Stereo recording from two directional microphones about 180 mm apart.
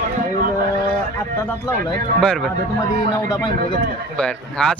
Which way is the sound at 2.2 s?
5° left (ahead or behind).